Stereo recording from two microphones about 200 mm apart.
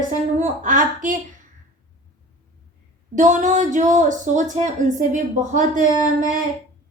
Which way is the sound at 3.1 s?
40° right (ahead or behind).